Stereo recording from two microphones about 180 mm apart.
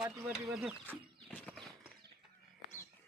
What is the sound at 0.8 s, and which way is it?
Horse, 10° left (ahead or behind).